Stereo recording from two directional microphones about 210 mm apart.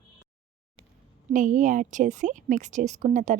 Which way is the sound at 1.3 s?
40° right (ahead or behind).